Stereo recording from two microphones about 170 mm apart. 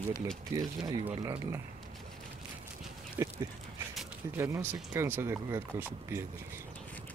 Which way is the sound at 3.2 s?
15° right (ahead or behind).